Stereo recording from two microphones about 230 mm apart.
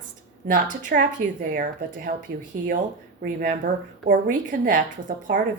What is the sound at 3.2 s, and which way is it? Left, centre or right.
Speech, right.